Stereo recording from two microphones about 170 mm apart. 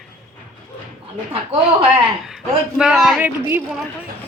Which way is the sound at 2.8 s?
Centre (ahead or behind).